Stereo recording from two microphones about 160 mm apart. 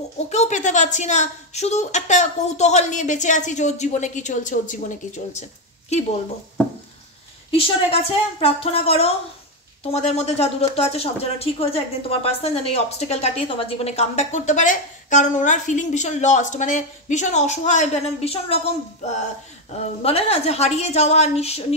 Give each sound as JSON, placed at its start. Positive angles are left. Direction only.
{"t": 0.3, "sound": "speech", "side_deg": 45}
{"t": 7.5, "sound": "a woman's voice", "side_deg": 35}
{"t": 20.0, "sound": "a woman's voice", "side_deg": 40}